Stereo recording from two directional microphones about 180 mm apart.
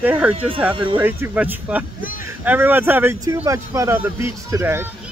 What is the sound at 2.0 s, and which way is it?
Speech, 50° left (ahead or behind).